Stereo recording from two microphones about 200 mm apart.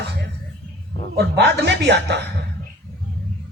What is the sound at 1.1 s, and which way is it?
A man's voice, 55° right (ahead or behind).